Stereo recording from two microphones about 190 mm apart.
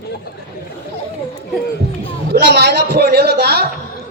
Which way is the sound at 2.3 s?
60° right (ahead or behind).